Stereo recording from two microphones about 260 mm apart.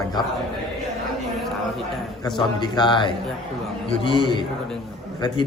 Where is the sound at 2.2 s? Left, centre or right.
Centre.